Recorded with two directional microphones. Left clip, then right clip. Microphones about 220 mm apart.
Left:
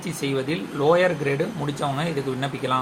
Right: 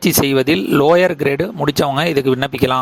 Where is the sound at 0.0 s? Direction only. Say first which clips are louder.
Right 12 dB; 45° right (ahead or behind).